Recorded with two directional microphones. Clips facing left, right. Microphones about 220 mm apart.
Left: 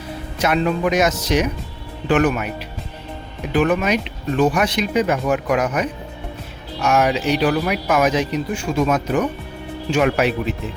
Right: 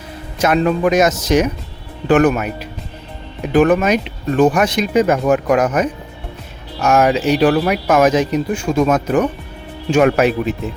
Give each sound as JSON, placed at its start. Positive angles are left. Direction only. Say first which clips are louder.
{"t": 0.3, "sound": "speech", "louder": "right 4 dB", "side_deg": -45}